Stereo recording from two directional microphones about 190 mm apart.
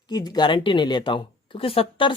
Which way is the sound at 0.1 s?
20° left (ahead or behind).